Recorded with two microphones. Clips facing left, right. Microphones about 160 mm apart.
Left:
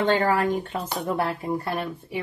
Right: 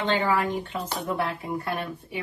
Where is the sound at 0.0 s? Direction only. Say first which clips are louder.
Left 3 dB; 45° left (ahead or behind).